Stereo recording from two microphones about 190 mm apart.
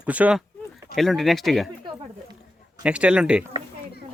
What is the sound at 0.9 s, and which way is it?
Speech, centre (ahead or behind).